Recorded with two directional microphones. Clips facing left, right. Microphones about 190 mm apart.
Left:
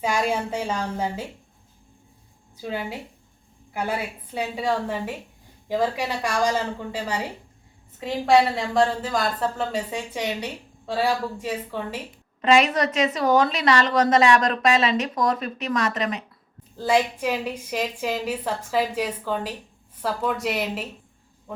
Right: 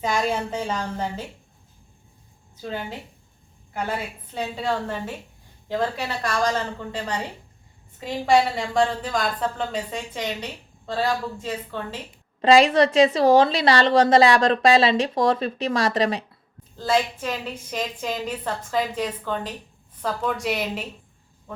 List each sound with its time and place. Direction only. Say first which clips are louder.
0.0 s a woman's voice: even; 10° left (ahead or behind)
2.6 s a woman's voice: left 1 dB; 10° left (ahead or behind)
12.4 s a woman's voice: right 4 dB; 30° right (ahead or behind)
16.7 s a woman's voice: left 1 dB; 15° left (ahead or behind)